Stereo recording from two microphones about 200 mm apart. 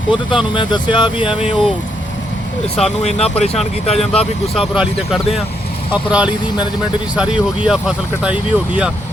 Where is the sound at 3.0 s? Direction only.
35° left (ahead or behind).